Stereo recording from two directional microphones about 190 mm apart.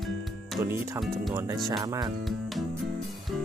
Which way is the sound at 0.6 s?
15° right (ahead or behind).